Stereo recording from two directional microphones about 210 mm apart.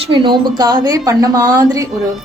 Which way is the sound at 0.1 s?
20° right (ahead or behind).